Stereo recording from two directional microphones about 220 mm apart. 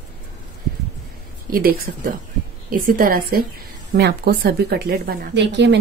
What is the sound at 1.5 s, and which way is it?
A woman's voice, 40° right (ahead or behind).